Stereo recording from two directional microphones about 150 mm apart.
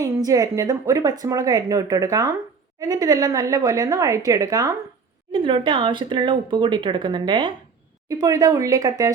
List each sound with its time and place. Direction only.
0.0 s speech: 25° right (ahead or behind)